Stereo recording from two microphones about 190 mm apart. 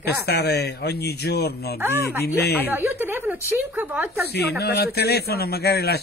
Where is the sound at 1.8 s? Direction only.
10° right (ahead or behind).